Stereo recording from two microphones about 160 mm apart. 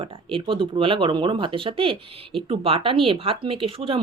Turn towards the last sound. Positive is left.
turn(degrees=-35)  # may be behind; listen again after turning